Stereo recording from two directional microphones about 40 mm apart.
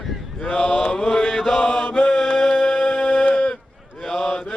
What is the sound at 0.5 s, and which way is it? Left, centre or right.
Mantra, left.